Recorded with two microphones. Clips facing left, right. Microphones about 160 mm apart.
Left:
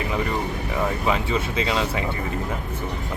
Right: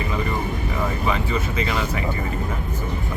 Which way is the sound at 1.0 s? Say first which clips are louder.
Left 1 dB; 15° left (ahead or behind).